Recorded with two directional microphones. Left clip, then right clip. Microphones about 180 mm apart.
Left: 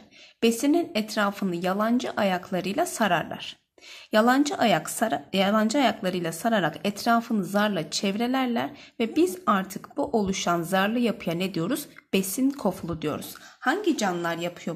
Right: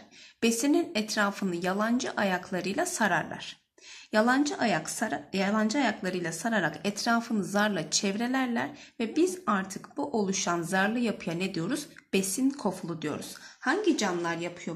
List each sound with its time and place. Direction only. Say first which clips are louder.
0.4 s a woman's voice: left 3 dB; 30° left (ahead or behind); by 14.7 s 50° left (ahead or behind)